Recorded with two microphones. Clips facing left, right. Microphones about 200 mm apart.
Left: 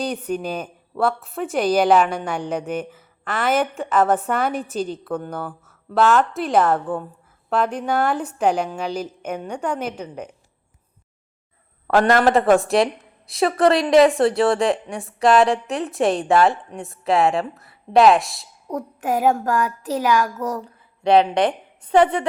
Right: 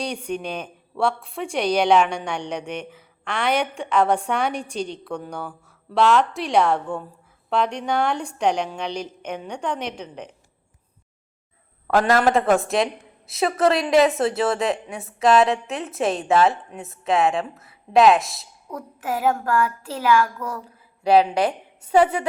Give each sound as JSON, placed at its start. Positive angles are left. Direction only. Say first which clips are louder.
{"t": 0.0, "sound": "a woman's voice", "louder": "left 3 dB", "side_deg": 5}
{"t": 11.9, "sound": "a woman's voice", "louder": "left 2 dB", "side_deg": 0}
{"t": 18.7, "sound": "a child's voice", "louder": "left 5 dB", "side_deg": 20}
{"t": 21.0, "sound": "a woman's voice", "louder": "left 1 dB", "side_deg": -5}